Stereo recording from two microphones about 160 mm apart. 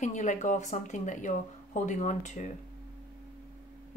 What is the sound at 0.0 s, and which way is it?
Speech, 50° left (ahead or behind).